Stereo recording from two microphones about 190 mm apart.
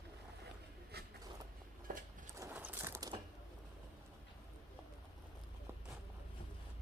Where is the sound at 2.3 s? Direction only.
10° right (ahead or behind).